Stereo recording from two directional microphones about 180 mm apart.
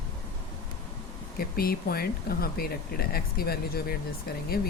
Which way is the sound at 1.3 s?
55° left (ahead or behind).